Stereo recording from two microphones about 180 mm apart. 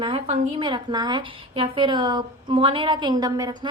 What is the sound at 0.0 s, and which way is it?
A woman's voice, 35° right (ahead or behind).